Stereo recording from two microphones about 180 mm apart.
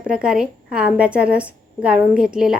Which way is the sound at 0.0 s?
5° right (ahead or behind).